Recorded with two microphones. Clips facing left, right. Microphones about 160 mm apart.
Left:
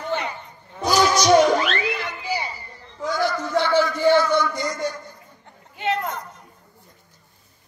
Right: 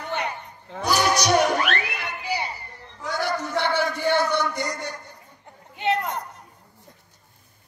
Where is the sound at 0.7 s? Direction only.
65° right (ahead or behind).